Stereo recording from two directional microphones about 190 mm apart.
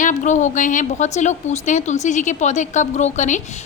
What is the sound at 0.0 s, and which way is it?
A woman's voice, 40° left (ahead or behind).